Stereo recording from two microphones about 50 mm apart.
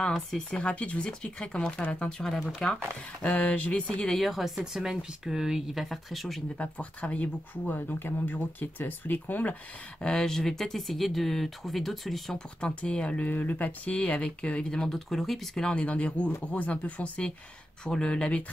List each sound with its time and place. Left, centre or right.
0.1 s speech: centre
0.6 s speech: left
4.2 s speech: centre
6.6 s speech: left
10.0 s speech: centre
12.5 s speech: left
13.3 s speech: left; by 15.7 s centre
15.7 s speech: left